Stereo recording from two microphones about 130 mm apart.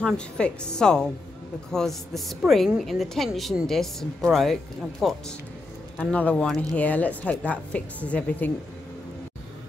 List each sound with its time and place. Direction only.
0.0 s a woman's voice: 5° left (ahead or behind)